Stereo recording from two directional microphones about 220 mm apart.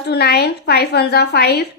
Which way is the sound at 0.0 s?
50° left (ahead or behind).